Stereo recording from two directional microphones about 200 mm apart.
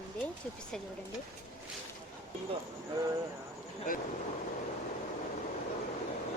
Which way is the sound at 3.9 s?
45° left (ahead or behind).